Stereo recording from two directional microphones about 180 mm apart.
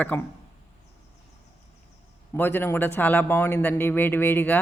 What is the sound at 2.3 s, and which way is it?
A woman's voice, 10° left (ahead or behind).